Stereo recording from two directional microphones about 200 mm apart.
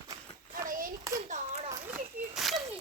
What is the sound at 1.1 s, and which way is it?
Children playing, 40° right (ahead or behind).